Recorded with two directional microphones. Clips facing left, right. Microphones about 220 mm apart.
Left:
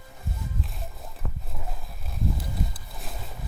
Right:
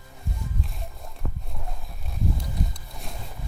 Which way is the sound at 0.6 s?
Centre (ahead or behind).